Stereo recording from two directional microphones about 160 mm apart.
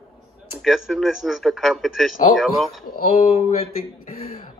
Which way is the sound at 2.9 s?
60° left (ahead or behind).